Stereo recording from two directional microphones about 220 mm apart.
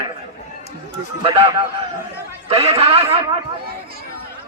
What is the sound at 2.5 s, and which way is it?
Speech, 25° right (ahead or behind).